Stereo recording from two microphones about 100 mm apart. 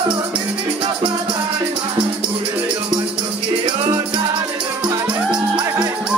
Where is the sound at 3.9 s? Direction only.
50° right (ahead or behind).